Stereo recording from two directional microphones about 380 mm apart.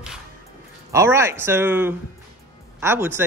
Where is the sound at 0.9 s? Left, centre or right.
Centre.